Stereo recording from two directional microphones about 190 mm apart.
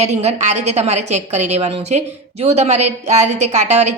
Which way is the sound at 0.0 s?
35° right (ahead or behind).